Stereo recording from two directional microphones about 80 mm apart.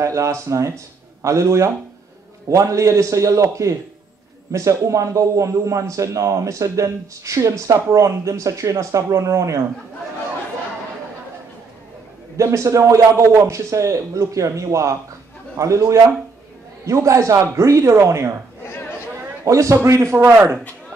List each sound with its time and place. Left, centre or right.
0.0 s a man's voice: right
12.4 s a man's voice: right
19.4 s a man's voice: right